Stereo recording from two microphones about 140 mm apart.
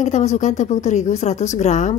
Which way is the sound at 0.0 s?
55° left (ahead or behind).